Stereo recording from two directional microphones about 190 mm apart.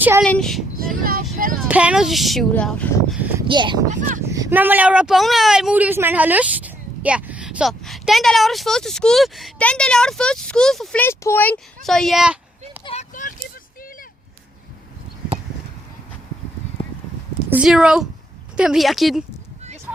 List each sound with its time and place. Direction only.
0.2 s speech: 5° left (ahead or behind)
1.0 s speech: 50° right (ahead or behind)
1.6 s speech: 5° right (ahead or behind)
3.2 s a sound: 10° right (ahead or behind)
3.4 s speech: 25° right (ahead or behind)
3.8 s speech: 45° right (ahead or behind)
4.3 s speech: 15° right (ahead or behind)
12.8 s vehicle: 35° left (ahead or behind)
16.8 s a sound: 30° left (ahead or behind)
17.5 s speech: 5° right (ahead or behind)